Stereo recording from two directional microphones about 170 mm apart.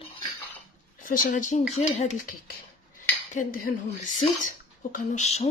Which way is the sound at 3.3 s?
55° left (ahead or behind).